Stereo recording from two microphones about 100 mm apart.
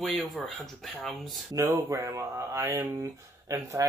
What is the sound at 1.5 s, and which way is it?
Speech, 35° right (ahead or behind).